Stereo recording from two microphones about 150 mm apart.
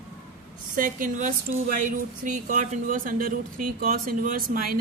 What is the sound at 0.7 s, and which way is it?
Speech, 65° right (ahead or behind).